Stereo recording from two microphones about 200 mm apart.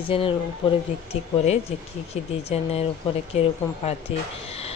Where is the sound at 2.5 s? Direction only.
30° left (ahead or behind).